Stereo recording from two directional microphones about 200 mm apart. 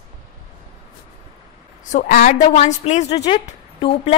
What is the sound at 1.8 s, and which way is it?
A woman's voice, 40° left (ahead or behind).